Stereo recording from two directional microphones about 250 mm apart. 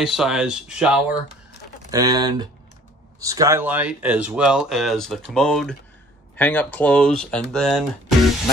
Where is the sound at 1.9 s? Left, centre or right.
Centre.